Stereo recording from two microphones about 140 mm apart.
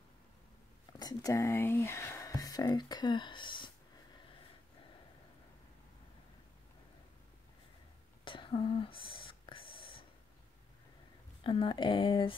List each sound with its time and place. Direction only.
0.9 s speech: 25° left (ahead or behind)
8.3 s whispering: 40° left (ahead or behind)
11.4 s speech: 40° left (ahead or behind)